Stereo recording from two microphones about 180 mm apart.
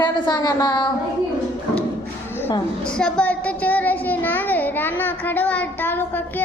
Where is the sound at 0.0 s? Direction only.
20° left (ahead or behind).